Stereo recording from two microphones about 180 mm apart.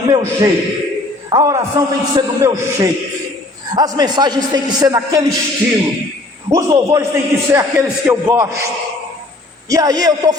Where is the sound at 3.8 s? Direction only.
25° right (ahead or behind).